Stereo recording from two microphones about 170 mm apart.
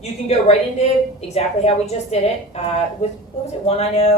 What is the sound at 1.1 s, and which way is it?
Speech, 40° left (ahead or behind).